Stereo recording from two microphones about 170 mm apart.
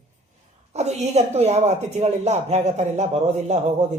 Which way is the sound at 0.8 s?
40° right (ahead or behind).